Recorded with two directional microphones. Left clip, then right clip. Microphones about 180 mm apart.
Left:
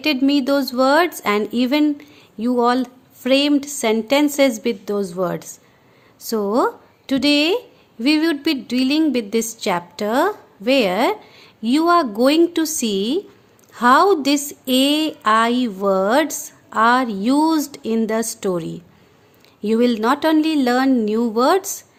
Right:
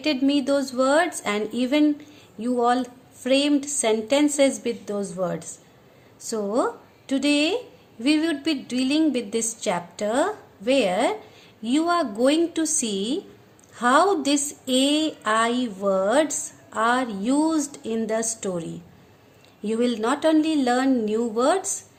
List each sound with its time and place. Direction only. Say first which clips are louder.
0.0 s a woman's voice: left 5 dB; 45° left (ahead or behind)